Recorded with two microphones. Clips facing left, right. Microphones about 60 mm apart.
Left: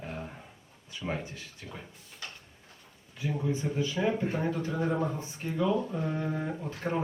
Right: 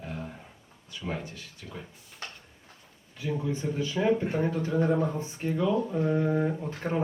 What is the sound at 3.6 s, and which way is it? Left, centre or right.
Speech, centre.